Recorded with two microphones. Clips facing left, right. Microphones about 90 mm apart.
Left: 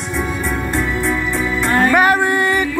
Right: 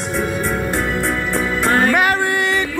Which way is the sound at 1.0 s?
65° right (ahead or behind).